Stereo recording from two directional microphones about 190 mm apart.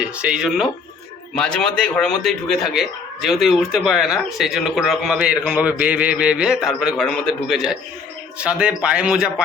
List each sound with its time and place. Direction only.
0.0 s speech: 5° right (ahead or behind)